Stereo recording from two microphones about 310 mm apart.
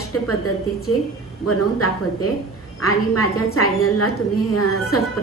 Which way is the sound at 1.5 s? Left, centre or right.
Left.